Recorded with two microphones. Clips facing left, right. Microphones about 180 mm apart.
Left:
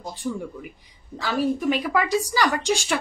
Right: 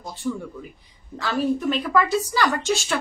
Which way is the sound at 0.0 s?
15° left (ahead or behind).